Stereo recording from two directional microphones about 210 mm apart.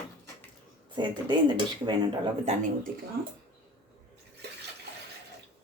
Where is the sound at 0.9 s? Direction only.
20° right (ahead or behind).